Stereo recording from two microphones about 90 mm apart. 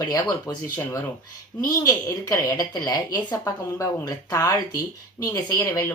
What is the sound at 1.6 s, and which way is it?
Speech, 40° left (ahead or behind).